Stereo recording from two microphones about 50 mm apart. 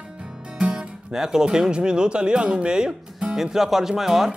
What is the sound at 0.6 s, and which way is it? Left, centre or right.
Guitar, centre.